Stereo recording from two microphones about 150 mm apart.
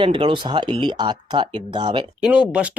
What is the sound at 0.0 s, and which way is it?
Speech, 35° right (ahead or behind).